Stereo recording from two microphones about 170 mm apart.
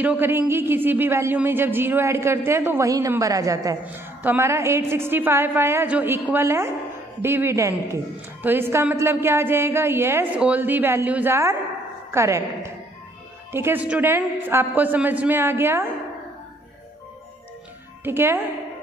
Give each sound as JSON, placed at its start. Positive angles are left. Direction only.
{"t": 0.0, "sound": "a woman's voice", "side_deg": -10}
{"t": 18.0, "sound": "a woman's voice", "side_deg": -15}